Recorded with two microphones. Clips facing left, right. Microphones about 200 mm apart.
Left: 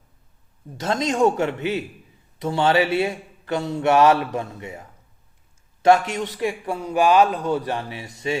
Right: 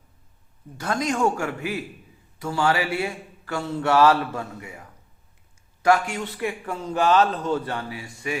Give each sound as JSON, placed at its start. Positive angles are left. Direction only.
{"t": 0.8, "sound": "a man's voice", "side_deg": 25}